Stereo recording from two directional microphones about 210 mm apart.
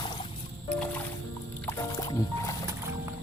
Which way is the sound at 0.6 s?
5° left (ahead or behind).